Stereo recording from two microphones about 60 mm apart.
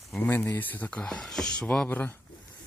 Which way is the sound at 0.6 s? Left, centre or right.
Left.